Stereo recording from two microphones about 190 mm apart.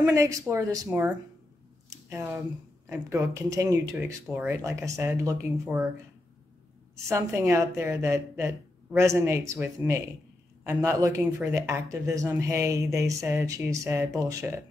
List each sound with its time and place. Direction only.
0.0 s speech: 15° right (ahead or behind)
1.9 s a sound: 15° right (ahead or behind)
2.9 s speech: 15° right (ahead or behind)
7.1 s speech: 15° right (ahead or behind)